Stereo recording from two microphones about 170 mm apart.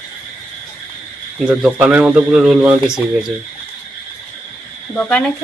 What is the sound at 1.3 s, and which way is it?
Speech, 5° right (ahead or behind).